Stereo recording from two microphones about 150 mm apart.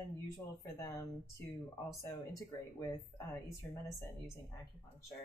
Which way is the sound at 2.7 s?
20° left (ahead or behind).